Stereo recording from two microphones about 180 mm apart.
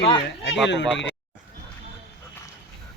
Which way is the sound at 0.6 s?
80° left.